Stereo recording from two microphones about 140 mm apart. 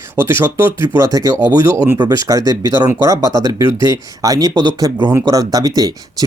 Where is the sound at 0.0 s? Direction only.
20° right (ahead or behind).